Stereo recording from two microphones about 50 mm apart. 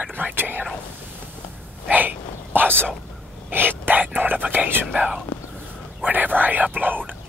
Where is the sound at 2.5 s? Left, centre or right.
Right.